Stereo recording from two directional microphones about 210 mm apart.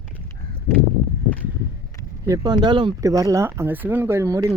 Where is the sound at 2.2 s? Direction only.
15° right (ahead or behind).